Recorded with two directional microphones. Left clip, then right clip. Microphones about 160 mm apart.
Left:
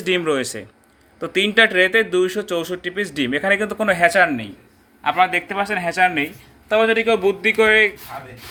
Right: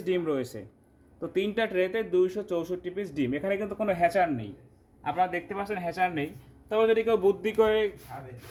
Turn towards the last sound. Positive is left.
turn(degrees=-15)  # may be behind; listen again after turning